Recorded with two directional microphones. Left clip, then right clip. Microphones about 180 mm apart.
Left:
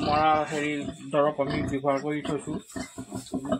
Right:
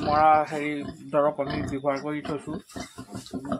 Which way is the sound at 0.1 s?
15° left (ahead or behind).